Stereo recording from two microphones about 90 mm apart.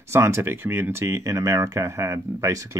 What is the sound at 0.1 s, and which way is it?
Speech, 30° right (ahead or behind).